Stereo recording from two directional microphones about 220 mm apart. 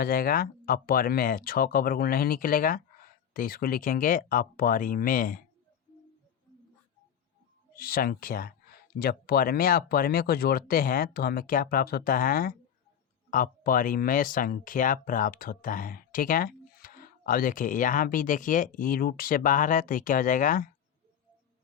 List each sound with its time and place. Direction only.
0.0 s speech: 40° left (ahead or behind)
7.8 s speech: 40° left (ahead or behind)